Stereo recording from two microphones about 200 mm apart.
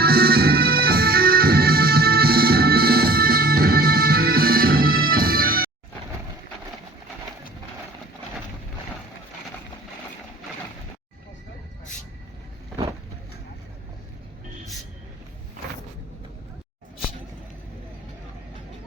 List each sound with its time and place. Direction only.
0.0 s music: 50° right (ahead or behind)